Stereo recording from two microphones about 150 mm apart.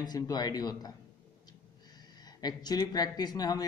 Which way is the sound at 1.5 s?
25° left (ahead or behind).